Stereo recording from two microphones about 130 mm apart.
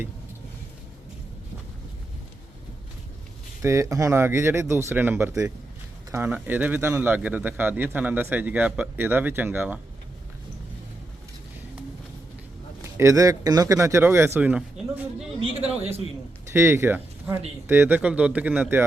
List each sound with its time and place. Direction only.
3.6 s a man's voice: 20° right (ahead or behind)
13.0 s speech: 25° right (ahead or behind)
16.5 s a man's voice: 20° right (ahead or behind)